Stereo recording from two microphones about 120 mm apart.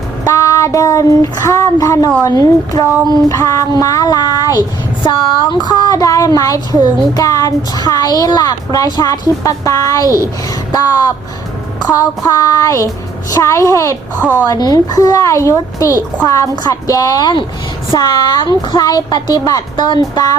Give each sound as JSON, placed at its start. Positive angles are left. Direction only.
{"t": 0.3, "sound": "child singing", "side_deg": 25}
{"t": 2.2, "sound": "a woman's voice", "side_deg": 30}
{"t": 5.6, "sound": "speech", "side_deg": 30}
{"t": 11.8, "sound": "a woman's voice", "side_deg": 30}
{"t": 14.2, "sound": "a woman's voice", "side_deg": -15}
{"t": 14.4, "sound": "a woman's voice", "side_deg": 30}